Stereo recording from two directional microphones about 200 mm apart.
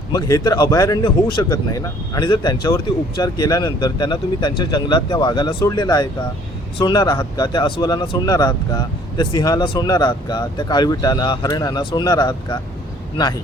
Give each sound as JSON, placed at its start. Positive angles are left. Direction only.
{"t": 0.1, "sound": "a man's voice", "side_deg": 15}